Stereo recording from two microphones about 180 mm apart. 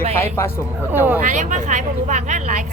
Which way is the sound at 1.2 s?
45° right (ahead or behind).